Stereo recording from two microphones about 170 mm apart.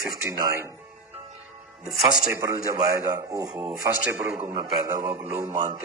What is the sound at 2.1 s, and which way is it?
A man's voice, 15° right (ahead or behind).